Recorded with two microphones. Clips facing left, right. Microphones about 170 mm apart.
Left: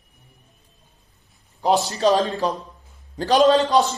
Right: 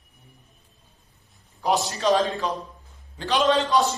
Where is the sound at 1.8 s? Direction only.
35° left (ahead or behind).